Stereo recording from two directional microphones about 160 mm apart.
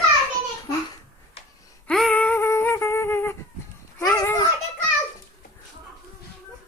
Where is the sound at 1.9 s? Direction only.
5° left (ahead or behind).